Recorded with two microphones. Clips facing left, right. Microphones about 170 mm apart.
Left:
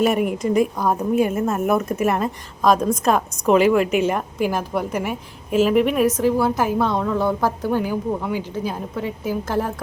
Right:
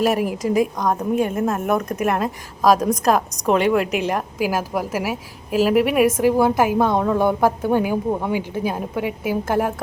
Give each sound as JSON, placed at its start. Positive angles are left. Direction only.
{"t": 0.0, "sound": "a woman's voice", "side_deg": 0}